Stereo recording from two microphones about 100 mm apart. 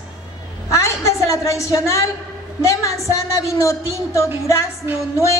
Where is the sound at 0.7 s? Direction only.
30° left (ahead or behind).